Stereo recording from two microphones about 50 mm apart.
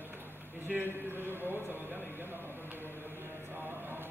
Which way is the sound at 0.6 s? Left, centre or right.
Right.